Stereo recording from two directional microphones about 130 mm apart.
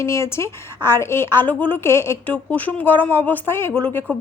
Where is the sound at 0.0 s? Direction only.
20° left (ahead or behind).